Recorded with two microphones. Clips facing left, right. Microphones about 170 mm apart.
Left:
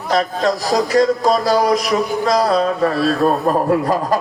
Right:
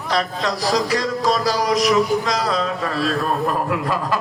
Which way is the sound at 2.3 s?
40° left (ahead or behind).